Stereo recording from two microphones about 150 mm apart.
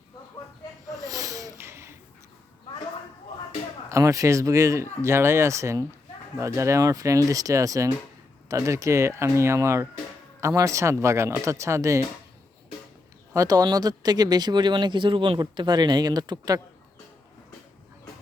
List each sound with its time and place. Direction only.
1.0 s a sound: 25° right (ahead or behind)
3.8 s speech: 20° right (ahead or behind)
13.3 s speech: 25° right (ahead or behind)